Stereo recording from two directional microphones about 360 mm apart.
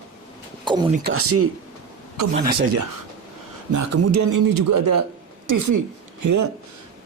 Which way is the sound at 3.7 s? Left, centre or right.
Right.